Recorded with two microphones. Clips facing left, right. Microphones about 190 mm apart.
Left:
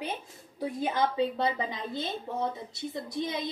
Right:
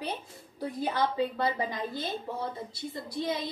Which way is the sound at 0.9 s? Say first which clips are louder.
Left 1 dB; 20° left (ahead or behind).